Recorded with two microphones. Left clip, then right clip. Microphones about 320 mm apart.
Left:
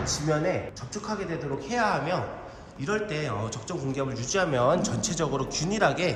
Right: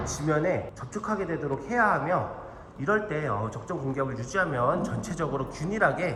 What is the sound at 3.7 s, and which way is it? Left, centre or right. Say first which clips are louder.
A man's voice: right 1 dB; centre.